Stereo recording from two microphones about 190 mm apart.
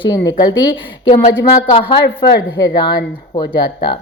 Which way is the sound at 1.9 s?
25° left (ahead or behind).